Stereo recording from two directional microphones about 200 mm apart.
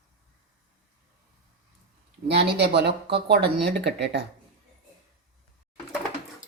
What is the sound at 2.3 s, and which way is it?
Speech, 55° right (ahead or behind).